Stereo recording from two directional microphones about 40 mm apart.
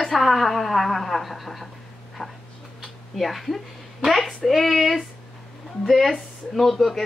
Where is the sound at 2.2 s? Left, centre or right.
Centre.